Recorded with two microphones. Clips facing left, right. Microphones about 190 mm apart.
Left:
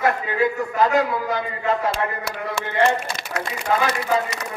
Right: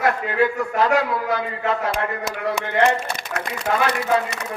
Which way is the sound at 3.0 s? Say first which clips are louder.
Right 1 dB; 65° right (ahead or behind).